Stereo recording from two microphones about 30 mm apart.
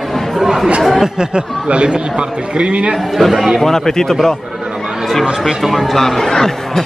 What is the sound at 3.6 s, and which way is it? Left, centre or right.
Speech, centre.